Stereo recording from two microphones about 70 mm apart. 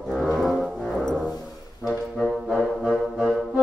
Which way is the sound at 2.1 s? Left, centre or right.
Centre.